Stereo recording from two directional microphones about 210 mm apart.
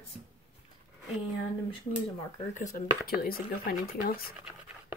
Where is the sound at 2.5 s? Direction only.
35° left (ahead or behind).